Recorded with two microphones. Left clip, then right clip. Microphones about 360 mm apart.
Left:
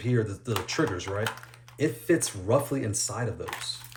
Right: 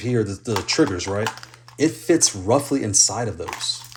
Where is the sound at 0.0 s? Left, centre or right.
Centre.